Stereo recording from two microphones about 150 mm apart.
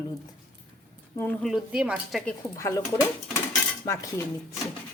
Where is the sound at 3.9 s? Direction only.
20° left (ahead or behind).